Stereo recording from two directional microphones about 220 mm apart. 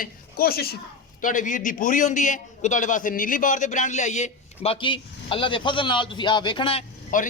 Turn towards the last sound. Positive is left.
turn(degrees=35)  # may be behind; listen again after turning